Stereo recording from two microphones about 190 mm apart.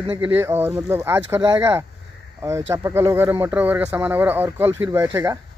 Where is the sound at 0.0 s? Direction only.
30° right (ahead or behind).